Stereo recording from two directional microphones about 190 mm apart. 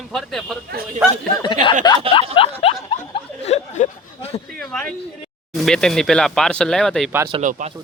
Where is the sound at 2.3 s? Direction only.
30° left (ahead or behind).